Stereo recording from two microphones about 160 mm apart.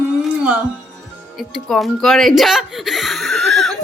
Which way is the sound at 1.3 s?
Centre (ahead or behind).